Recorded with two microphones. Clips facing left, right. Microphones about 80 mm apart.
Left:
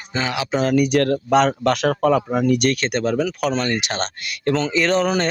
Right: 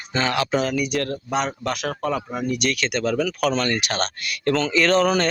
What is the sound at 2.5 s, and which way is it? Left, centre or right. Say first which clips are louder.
Speech: left 5 dB; left.